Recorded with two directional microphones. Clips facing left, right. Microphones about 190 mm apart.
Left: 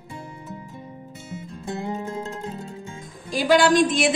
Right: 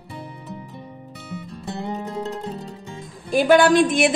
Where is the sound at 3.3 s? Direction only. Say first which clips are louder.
Right 3 dB; 55° right (ahead or behind).